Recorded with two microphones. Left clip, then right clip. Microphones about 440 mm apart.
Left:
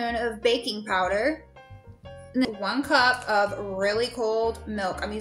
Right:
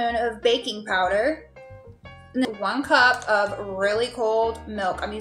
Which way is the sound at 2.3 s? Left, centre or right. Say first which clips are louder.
Right 2 dB; left.